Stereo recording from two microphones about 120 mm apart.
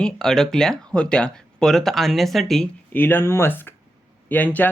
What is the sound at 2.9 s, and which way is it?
Speech, 15° left (ahead or behind).